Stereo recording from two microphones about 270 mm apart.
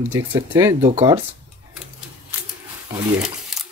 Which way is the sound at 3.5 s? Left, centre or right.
Centre.